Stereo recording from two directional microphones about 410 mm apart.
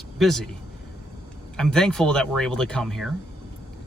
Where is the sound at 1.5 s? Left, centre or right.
Centre.